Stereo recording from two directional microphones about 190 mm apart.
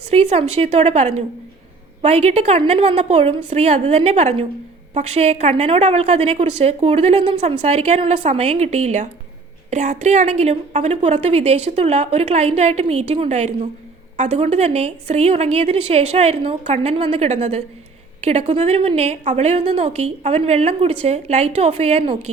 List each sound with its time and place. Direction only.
0.1 s a woman's voice: 30° right (ahead or behind)